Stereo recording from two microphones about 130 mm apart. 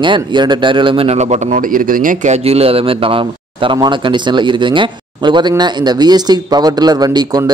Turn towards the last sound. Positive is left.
turn(degrees=-30)  # may be behind; listen again after turning